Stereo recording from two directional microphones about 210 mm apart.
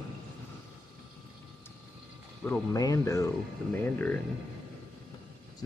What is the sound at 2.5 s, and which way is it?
Speech, 15° left (ahead or behind).